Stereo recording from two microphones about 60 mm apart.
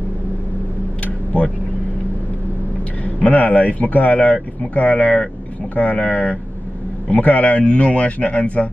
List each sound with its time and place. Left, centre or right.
1.0 s vehicle: left
3.2 s speech: left